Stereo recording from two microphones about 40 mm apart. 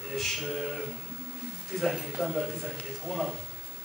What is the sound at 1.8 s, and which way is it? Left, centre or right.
Speech, centre.